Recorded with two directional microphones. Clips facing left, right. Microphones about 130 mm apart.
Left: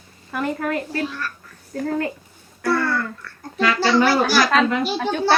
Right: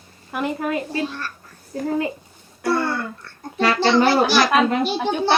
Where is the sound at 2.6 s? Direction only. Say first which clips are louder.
Even; 25° right (ahead or behind).